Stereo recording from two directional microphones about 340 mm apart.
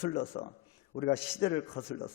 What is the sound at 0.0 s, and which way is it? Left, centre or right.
A man's voice, left.